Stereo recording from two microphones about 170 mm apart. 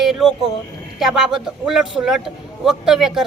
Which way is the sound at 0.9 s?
Centre (ahead or behind).